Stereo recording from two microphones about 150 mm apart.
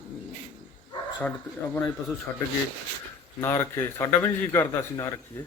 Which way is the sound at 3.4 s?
15° left (ahead or behind).